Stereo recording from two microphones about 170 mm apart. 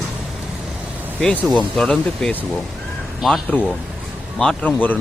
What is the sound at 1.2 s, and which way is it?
Speech, 5° left (ahead or behind).